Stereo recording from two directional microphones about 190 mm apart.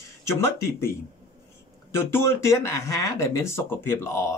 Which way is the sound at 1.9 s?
15° left (ahead or behind).